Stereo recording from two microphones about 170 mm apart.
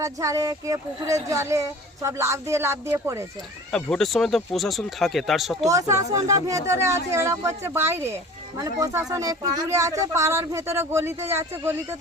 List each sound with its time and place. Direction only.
0.0 s speech: 20° right (ahead or behind)
3.7 s speech: 5° left (ahead or behind)
5.6 s speech: 20° right (ahead or behind)